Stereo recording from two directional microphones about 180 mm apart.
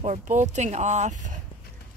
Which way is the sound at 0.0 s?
40° right (ahead or behind).